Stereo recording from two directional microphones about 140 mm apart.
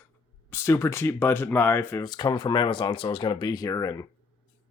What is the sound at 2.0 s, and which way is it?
Speech, 30° left (ahead or behind).